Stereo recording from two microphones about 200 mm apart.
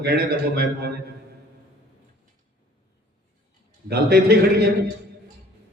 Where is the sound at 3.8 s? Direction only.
50° right (ahead or behind).